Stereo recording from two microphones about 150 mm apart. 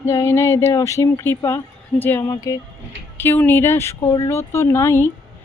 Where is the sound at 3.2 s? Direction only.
15° left (ahead or behind).